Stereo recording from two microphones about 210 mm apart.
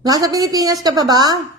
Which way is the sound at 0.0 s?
15° right (ahead or behind).